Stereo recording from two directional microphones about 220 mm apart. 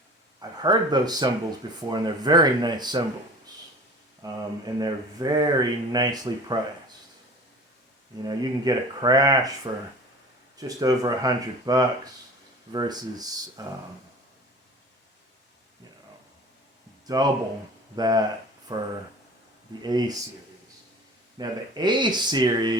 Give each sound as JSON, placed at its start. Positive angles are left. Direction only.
{"t": 0.3, "sound": "speech", "side_deg": -20}
{"t": 4.2, "sound": "speech", "side_deg": -15}
{"t": 8.2, "sound": "speech", "side_deg": -15}
{"t": 10.6, "sound": "speech", "side_deg": -15}
{"t": 17.1, "sound": "speech", "side_deg": -15}
{"t": 21.3, "sound": "speech", "side_deg": -20}